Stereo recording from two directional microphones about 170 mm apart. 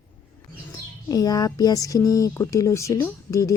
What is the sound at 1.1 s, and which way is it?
Speech, 20° left (ahead or behind).